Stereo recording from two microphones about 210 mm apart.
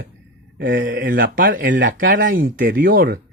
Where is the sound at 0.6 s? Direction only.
40° right (ahead or behind).